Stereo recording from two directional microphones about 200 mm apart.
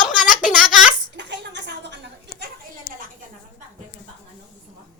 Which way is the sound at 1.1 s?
60° right (ahead or behind).